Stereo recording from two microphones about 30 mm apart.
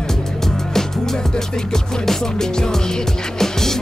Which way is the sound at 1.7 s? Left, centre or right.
Centre.